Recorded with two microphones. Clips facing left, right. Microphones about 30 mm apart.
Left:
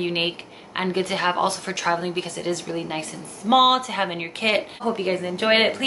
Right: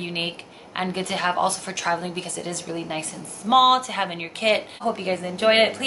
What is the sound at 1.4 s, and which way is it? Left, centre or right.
A woman's voice, centre.